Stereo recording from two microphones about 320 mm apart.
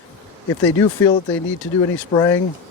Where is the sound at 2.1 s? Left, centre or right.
Centre.